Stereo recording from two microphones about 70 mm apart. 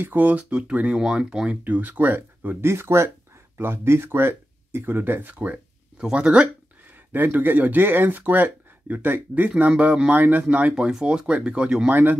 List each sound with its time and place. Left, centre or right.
0.0 s speech: right
1.6 s speech: right
5.3 s speech: right
7.1 s speech: right
10.7 s speech: centre
11.9 s speech: right